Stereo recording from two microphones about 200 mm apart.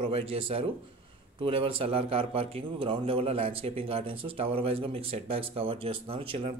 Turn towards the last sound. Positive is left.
turn(degrees=-30)  # may be behind; listen again after turning